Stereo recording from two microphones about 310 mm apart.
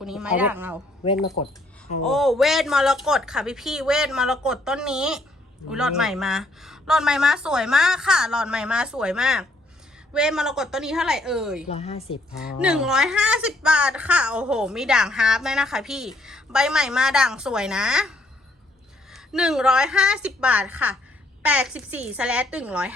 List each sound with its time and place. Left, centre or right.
0.0 s a woman's voice: centre
1.4 s a woman's voice: centre
2.0 s a woman's voice: centre
11.7 s a woman's voice: centre
12.5 s a woman's voice: centre
19.1 s a woman's voice: centre